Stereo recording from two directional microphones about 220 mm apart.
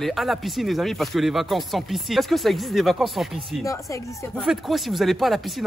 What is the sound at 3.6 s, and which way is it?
Speech, 15° left (ahead or behind).